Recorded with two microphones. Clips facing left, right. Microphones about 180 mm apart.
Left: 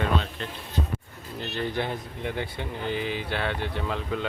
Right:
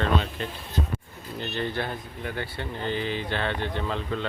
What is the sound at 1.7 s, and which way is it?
Speech, 20° left (ahead or behind).